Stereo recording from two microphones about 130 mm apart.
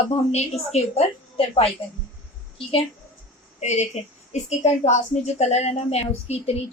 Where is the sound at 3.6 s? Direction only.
60° left (ahead or behind).